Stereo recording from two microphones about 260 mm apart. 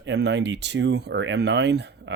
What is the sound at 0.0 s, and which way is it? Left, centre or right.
Speech, right.